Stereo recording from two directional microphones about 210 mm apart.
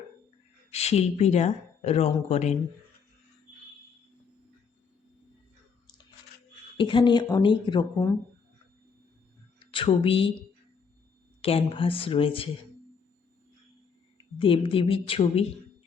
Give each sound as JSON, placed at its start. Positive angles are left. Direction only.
{"t": 0.7, "sound": "speech", "side_deg": 30}
{"t": 6.7, "sound": "speech", "side_deg": 25}
{"t": 9.6, "sound": "speech", "side_deg": 25}
{"t": 11.4, "sound": "speech", "side_deg": 25}
{"t": 14.3, "sound": "speech", "side_deg": 25}